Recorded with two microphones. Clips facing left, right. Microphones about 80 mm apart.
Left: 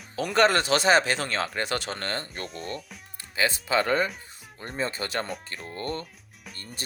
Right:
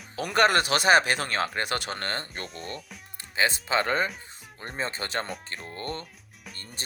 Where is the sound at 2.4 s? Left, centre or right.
Centre.